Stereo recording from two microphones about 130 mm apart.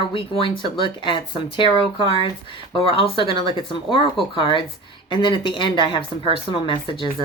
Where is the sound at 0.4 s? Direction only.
40° left (ahead or behind).